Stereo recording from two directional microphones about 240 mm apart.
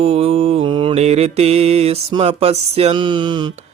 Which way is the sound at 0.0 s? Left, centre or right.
Right.